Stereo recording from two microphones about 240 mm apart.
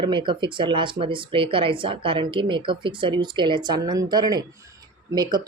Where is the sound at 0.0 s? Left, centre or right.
Centre.